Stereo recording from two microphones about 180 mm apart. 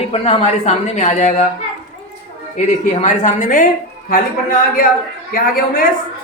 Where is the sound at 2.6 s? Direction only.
40° left (ahead or behind).